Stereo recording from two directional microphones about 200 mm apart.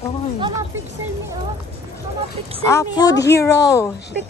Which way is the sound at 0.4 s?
15° right (ahead or behind).